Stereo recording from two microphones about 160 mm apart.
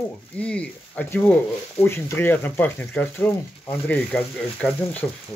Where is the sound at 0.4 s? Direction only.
5° left (ahead or behind).